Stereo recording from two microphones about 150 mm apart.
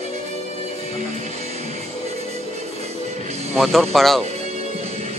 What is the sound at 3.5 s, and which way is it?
Speech, centre (ahead or behind).